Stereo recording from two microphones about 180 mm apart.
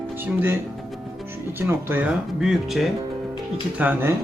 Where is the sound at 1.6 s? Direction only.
10° right (ahead or behind).